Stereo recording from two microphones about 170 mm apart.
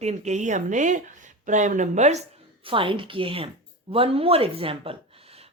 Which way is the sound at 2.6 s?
30° right (ahead or behind).